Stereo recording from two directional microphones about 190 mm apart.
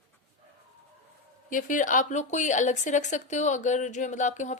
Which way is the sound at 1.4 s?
45° left (ahead or behind).